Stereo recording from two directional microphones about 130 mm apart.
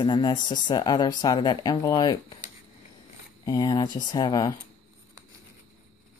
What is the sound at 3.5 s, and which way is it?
Speech, 30° left (ahead or behind).